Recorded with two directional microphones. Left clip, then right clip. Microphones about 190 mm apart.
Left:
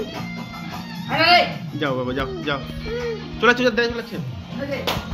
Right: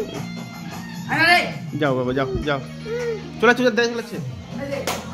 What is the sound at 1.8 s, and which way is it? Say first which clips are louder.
Speech: right 3 dB; 60° right (ahead or behind).